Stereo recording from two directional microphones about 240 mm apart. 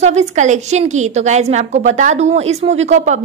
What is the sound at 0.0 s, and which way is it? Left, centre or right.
A woman's voice, right.